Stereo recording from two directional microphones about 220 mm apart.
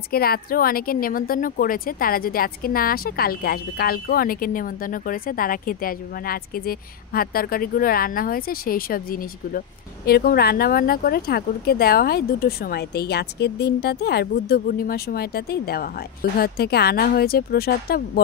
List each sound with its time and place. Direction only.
0.1 s speech: 45° left (ahead or behind)